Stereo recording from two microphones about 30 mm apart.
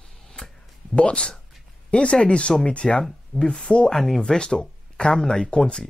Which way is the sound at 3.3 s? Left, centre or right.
Left.